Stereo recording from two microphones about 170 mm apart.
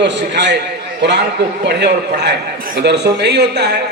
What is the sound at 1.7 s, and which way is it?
A man's voice, 85° right.